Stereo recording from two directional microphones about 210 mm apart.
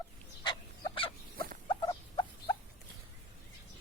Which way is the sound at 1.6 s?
20° left (ahead or behind).